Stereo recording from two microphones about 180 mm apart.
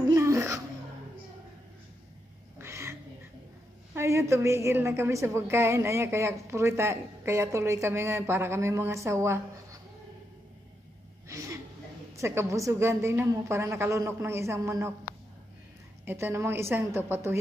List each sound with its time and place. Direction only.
0.1 s babbling: 15° right (ahead or behind)
2.6 s cat: 15° right (ahead or behind)
3.9 s a woman's voice: 15° right (ahead or behind)
11.2 s a sound: 15° right (ahead or behind)
12.2 s a woman's voice: 15° right (ahead or behind)
16.1 s a woman's voice: 15° right (ahead or behind)